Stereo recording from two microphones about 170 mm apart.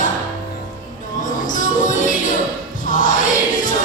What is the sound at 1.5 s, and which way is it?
Music, 50° left (ahead or behind).